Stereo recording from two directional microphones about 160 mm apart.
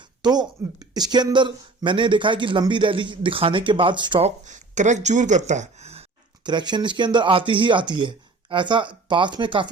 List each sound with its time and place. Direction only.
0.2 s speech: 25° right (ahead or behind)
4.4 s speech: 50° right (ahead or behind)
6.4 s speech: 30° right (ahead or behind)